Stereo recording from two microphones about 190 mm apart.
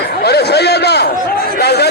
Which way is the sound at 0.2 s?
60° left (ahead or behind).